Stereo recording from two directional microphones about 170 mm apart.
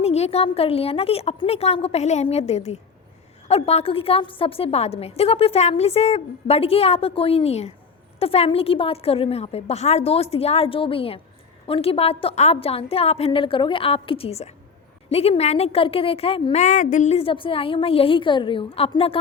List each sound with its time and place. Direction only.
0.0 s a woman's voice: 40° left (ahead or behind)